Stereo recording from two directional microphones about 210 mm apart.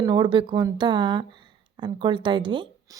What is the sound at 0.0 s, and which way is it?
Speech, 20° right (ahead or behind).